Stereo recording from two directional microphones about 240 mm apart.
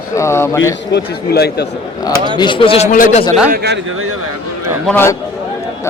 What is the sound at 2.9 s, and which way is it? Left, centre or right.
Speech, left.